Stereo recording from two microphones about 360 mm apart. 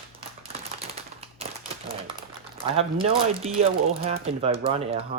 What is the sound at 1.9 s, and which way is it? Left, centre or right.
Typewriter, centre.